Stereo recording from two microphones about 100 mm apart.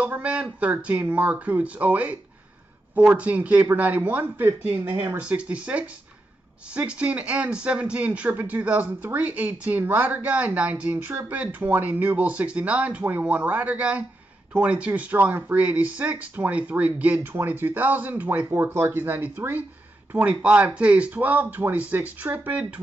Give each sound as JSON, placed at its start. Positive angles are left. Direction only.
{"t": 0.0, "sound": "speech", "side_deg": -15}